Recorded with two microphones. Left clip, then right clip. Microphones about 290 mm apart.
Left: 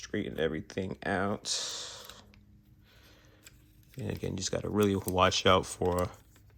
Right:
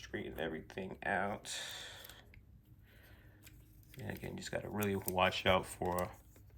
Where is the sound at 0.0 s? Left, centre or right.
Left.